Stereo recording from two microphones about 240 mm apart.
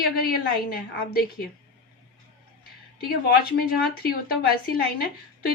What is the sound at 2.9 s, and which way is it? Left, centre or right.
A woman's voice, left.